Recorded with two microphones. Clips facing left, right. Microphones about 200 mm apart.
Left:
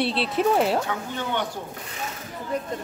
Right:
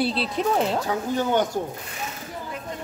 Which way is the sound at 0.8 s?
40° right (ahead or behind).